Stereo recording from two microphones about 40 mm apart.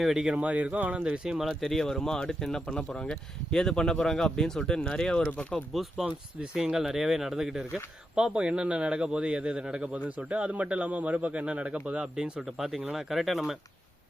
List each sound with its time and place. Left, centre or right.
0.2 s speech: right
0.4 s speech: right
1.0 s speech: right
1.5 s speech: centre; by 5.6 s left
6.0 s speech: centre
12.1 s speech: centre